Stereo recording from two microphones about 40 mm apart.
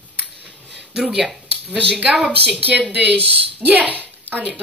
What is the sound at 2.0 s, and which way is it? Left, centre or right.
Speech, right.